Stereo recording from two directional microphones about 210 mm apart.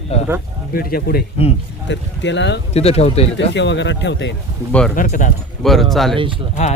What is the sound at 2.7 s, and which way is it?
Speech, 30° left (ahead or behind).